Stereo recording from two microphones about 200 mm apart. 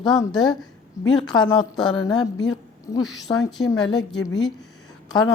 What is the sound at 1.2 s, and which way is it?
Speech, 20° left (ahead or behind).